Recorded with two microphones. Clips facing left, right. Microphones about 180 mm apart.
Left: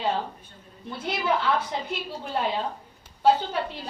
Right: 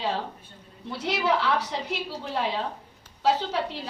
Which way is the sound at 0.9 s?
75° right (ahead or behind).